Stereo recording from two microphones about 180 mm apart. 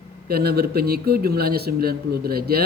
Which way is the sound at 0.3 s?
60° right (ahead or behind).